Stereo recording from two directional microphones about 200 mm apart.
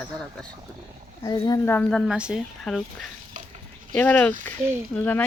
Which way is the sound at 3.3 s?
40° right (ahead or behind).